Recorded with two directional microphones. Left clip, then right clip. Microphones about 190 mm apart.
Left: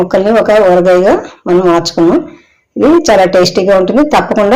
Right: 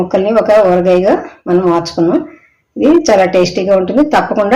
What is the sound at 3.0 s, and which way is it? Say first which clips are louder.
Speech: left 3 dB; 30° left (ahead or behind).